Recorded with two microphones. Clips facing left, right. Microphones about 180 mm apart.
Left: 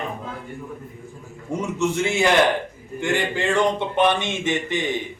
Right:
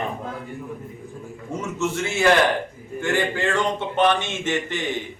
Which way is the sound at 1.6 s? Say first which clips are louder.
Left 3 dB; 15° left (ahead or behind).